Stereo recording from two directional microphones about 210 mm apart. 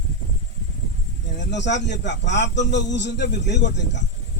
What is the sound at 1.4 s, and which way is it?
A man's voice, 55° left (ahead or behind).